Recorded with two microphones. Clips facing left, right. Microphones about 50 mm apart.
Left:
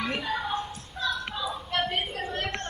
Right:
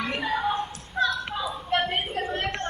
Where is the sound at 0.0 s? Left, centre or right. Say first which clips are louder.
Right 3 dB; right.